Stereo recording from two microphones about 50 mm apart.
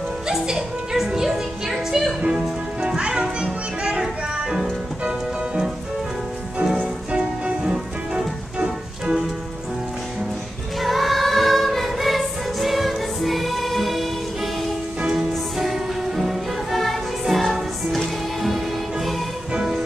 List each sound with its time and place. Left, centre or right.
0.3 s music: centre
2.2 s music: centre
5.0 s music: right
6.8 s music: right
7.7 s organ: centre
10.8 s music: centre